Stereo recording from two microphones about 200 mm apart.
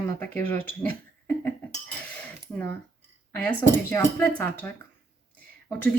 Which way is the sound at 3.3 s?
10° left (ahead or behind).